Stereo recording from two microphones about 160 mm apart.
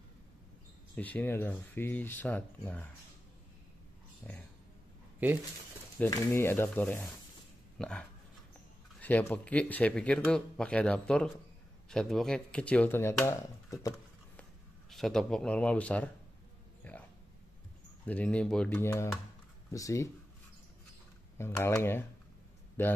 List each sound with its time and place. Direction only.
0.9 s speech: 10° left (ahead or behind)
4.2 s speech: 10° left (ahead or behind)
5.9 s speech: 15° left (ahead or behind)
9.0 s speech: 10° left (ahead or behind)
14.9 s speech: centre (ahead or behind)
16.8 s a sound: 10° left (ahead or behind)
18.0 s speech: 10° left (ahead or behind)
21.4 s speech: 15° left (ahead or behind)